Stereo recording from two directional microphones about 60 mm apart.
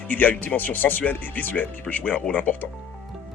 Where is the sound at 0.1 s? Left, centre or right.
Left.